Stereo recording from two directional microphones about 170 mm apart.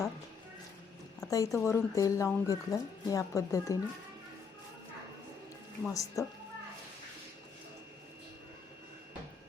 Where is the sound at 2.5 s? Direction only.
20° left (ahead or behind).